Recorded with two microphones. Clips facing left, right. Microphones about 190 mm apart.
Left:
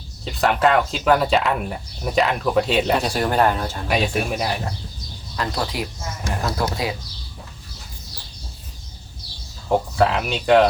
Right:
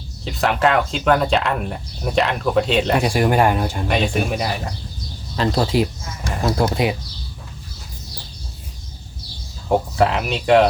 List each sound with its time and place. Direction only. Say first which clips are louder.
0.3 s speech: even; centre (ahead or behind)
3.0 s speech: right 3 dB; 10° right (ahead or behind)
3.8 s speech: even; 5° left (ahead or behind)
5.4 s speech: right 7 dB; 25° right (ahead or behind)
9.6 s speech: right 1 dB; 5° right (ahead or behind)